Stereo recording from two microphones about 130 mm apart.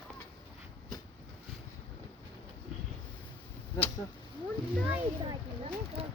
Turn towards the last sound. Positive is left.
turn(degrees=-50)  # may be behind; listen again after turning